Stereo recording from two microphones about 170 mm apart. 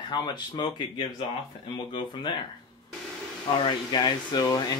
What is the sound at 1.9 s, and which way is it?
Speech, 30° left (ahead or behind).